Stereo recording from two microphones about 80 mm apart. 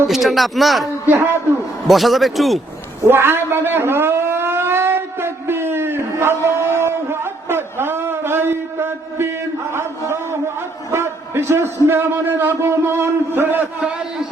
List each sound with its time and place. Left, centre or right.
0.1 s speech: centre
1.0 s a man's voice: right
1.9 s speech: centre
3.1 s civil defense siren: right
9.7 s a sound: right
10.9 s a man's voice: right